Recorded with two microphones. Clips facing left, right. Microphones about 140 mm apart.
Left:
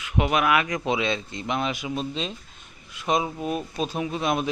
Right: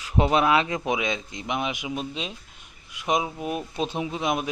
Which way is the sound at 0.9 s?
15° right (ahead or behind).